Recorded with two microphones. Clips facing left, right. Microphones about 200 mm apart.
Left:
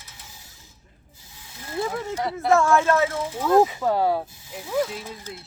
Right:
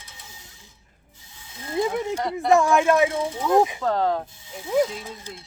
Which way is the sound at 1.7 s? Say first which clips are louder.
Right 3 dB; 20° right (ahead or behind).